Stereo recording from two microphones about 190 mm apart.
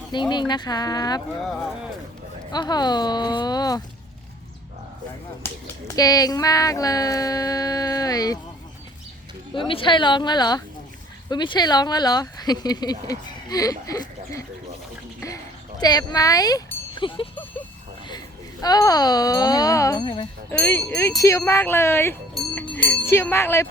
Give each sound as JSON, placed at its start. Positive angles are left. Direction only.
{"t": 0.1, "sound": "speech", "side_deg": 25}
{"t": 2.5, "sound": "speech", "side_deg": 20}
{"t": 6.0, "sound": "speech", "side_deg": 20}
{"t": 9.6, "sound": "speech", "side_deg": 25}
{"t": 15.8, "sound": "speech", "side_deg": 20}
{"t": 18.6, "sound": "speech", "side_deg": 20}
{"t": 20.5, "sound": "speech", "side_deg": 10}